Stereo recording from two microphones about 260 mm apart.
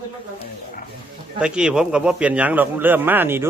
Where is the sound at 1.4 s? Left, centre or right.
Centre.